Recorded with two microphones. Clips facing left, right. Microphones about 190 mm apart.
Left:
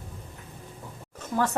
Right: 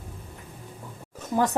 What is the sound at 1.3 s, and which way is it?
Speech, 15° right (ahead or behind).